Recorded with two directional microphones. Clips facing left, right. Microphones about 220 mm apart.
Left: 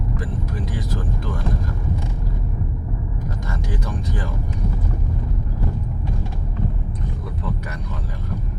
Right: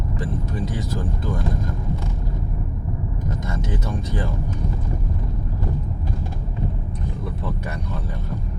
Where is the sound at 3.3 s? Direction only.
25° right (ahead or behind).